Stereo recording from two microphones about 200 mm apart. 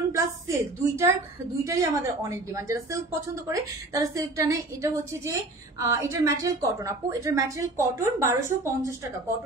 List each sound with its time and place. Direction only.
0.1 s a woman's voice: 15° right (ahead or behind)